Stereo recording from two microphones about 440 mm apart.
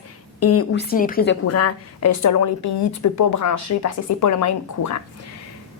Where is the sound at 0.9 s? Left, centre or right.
Centre.